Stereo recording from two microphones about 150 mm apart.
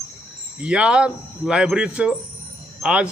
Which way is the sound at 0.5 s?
5° right (ahead or behind).